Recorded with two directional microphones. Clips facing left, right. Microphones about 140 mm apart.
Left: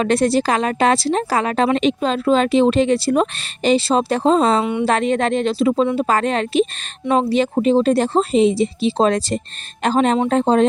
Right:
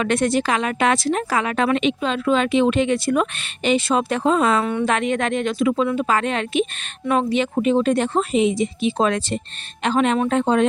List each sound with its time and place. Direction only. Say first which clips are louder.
0.0 s a woman's voice: left 3 dB; 35° left (ahead or behind)
4.6 s a woman's voice: left 2 dB; 15° left (ahead or behind)
4.9 s a woman's voice: left 3 dB; 35° left (ahead or behind)